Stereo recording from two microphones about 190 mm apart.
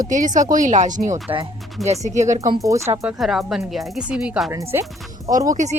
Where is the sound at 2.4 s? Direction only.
15° right (ahead or behind).